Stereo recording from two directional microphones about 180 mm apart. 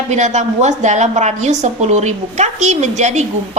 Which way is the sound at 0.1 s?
40° right (ahead or behind).